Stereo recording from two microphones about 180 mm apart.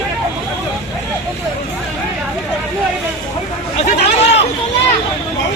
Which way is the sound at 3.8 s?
35° left (ahead or behind).